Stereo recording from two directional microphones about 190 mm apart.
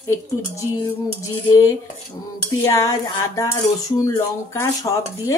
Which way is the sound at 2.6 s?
15° left (ahead or behind).